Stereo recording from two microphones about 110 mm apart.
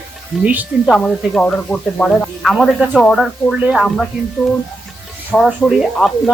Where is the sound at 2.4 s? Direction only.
Centre (ahead or behind).